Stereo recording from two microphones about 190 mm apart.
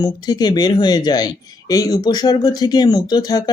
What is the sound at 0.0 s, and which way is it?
A man's voice, 20° left (ahead or behind).